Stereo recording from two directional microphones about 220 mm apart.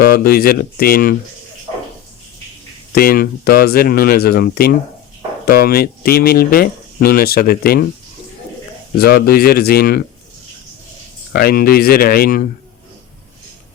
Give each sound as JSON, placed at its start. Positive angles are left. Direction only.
{"t": 0.1, "sound": "speech", "side_deg": 45}
{"t": 2.9, "sound": "speech", "side_deg": 45}
{"t": 9.0, "sound": "speech", "side_deg": 45}
{"t": 11.3, "sound": "speech", "side_deg": 45}